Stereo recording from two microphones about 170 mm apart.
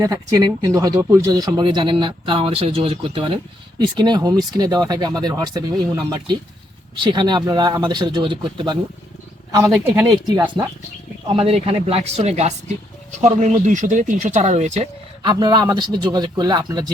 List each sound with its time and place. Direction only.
0.0 s speech: 20° right (ahead or behind)
9.6 s speech: 15° right (ahead or behind)
11.3 s speech: 35° right (ahead or behind)
15.2 s speech: 25° right (ahead or behind)